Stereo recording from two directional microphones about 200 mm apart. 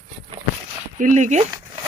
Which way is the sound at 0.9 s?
40° right (ahead or behind).